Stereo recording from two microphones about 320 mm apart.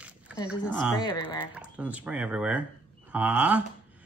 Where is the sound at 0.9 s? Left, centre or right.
Centre.